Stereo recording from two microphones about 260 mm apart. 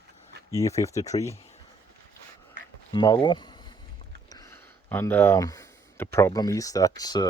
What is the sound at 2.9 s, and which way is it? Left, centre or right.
Speech, centre.